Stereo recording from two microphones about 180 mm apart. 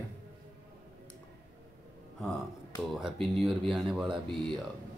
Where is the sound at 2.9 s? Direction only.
5° right (ahead or behind).